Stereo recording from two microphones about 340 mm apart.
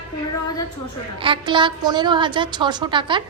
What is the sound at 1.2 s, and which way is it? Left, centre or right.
A woman's voice, centre.